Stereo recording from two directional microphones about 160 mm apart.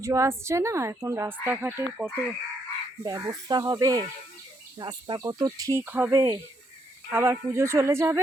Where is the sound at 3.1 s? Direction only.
25° right (ahead or behind).